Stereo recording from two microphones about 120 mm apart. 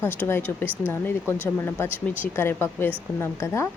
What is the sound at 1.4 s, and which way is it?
Speech, 20° left (ahead or behind).